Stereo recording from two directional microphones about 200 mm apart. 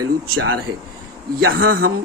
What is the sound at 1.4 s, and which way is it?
Speech, 90° right.